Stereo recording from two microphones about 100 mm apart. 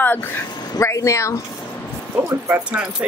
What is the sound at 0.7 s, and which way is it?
Speech, 30° left (ahead or behind).